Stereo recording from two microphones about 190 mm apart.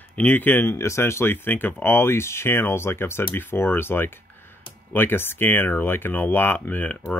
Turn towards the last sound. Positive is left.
turn(degrees=10)  # may be behind; listen again after turning